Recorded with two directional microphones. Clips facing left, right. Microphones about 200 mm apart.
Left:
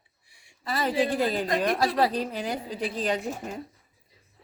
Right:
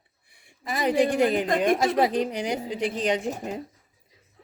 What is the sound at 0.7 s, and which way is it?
A woman's voice, 15° right (ahead or behind).